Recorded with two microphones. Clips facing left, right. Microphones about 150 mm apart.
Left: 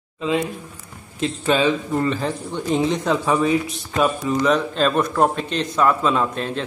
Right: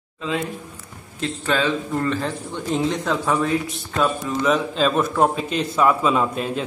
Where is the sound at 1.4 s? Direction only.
15° left (ahead or behind).